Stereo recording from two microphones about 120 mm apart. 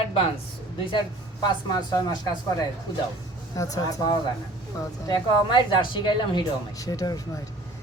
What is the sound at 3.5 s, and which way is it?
Speech, 30° left (ahead or behind).